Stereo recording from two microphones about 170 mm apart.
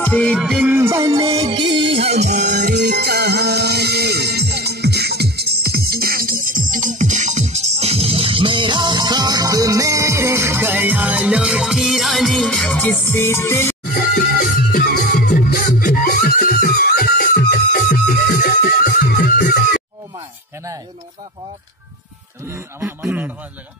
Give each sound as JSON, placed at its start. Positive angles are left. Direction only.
{"t": 0.0, "sound": "music", "side_deg": 5}
{"t": 0.7, "sound": "music", "side_deg": -15}
{"t": 14.1, "sound": "music", "side_deg": 55}
{"t": 22.5, "sound": "a man's voice", "side_deg": -10}